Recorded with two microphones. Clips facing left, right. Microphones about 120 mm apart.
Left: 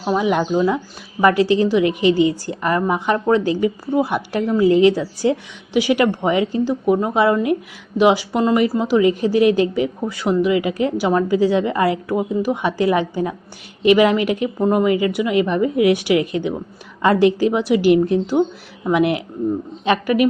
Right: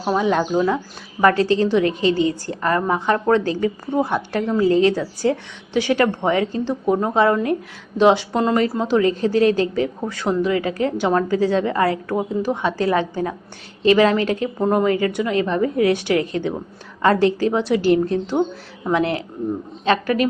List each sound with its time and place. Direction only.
0.2 s a woman's voice: 10° left (ahead or behind)
14.6 s a woman's voice: 5° left (ahead or behind)